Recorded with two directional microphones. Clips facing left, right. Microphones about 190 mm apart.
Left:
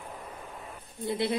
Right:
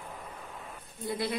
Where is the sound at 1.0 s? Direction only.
25° left (ahead or behind).